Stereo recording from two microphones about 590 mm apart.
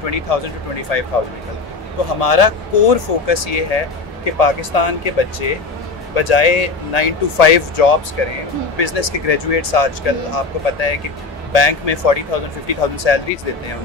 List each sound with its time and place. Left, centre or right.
0.0 s speech: left
2.1 s speech: left